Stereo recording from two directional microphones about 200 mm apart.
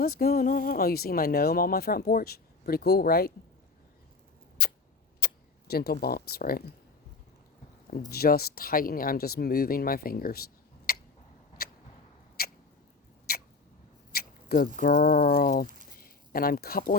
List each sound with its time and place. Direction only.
0.2 s speech: 45° left (ahead or behind)
4.6 s a sound: 50° left (ahead or behind)
5.2 s speech: 50° left (ahead or behind)
8.1 s speech: 50° left (ahead or behind)
10.9 s tick-tock: 50° left (ahead or behind)
11.6 s vehicle: 50° left (ahead or behind)
12.4 s rodents: 50° left (ahead or behind)
14.1 s speech: 50° left (ahead or behind)